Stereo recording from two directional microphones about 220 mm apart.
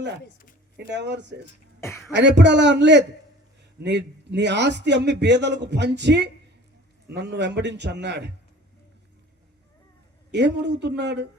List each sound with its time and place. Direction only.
0.9 s a man's voice: 50° right (ahead or behind)
10.3 s a man's voice: 50° right (ahead or behind)